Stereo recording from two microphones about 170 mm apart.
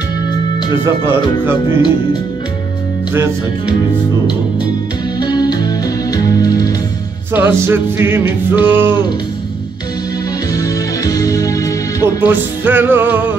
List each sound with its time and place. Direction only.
0.8 s music: 15° right (ahead or behind)
5.2 s music: 25° left (ahead or behind)
7.3 s music: 15° right (ahead or behind)
10.5 s music: 20° left (ahead or behind)
12.2 s music: 10° right (ahead or behind)